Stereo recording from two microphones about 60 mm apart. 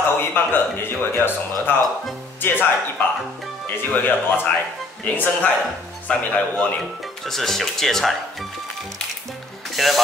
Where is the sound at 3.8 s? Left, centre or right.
Left.